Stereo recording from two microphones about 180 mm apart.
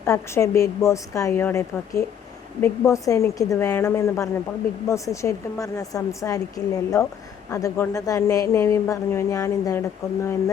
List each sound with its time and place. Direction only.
0.0 s a woman's voice: 15° left (ahead or behind)